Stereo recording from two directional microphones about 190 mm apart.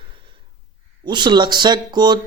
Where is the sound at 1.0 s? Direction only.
25° right (ahead or behind).